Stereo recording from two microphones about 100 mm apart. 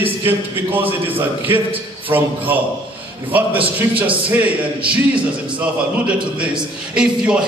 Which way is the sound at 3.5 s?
60° right (ahead or behind).